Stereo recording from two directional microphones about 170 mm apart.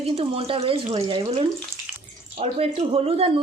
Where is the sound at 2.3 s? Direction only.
35° right (ahead or behind).